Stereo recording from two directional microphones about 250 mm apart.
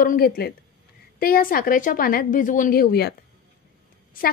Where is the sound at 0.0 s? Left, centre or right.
Left.